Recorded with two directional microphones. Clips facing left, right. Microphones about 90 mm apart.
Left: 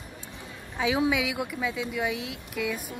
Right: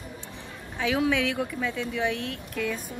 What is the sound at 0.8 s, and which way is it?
Speech, 15° left (ahead or behind).